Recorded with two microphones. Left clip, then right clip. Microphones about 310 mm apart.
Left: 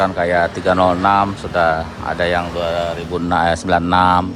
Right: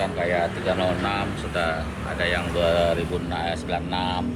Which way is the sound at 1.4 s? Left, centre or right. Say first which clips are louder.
Left 10 dB; centre.